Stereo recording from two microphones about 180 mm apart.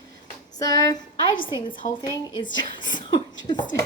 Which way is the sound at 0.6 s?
20° left (ahead or behind).